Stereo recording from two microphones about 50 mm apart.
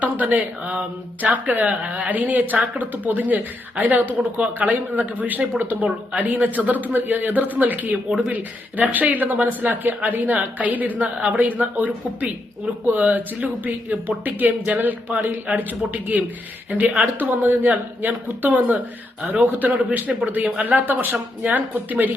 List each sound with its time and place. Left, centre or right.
0.0 s a man's voice: right
19.5 s speech: right